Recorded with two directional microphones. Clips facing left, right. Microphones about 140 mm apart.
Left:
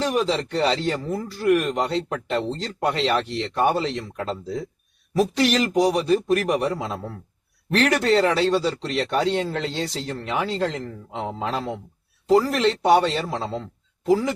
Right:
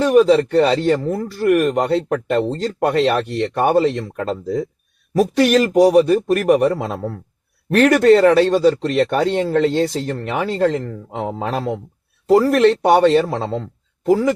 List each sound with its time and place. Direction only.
0.0 s speech: 55° right (ahead or behind)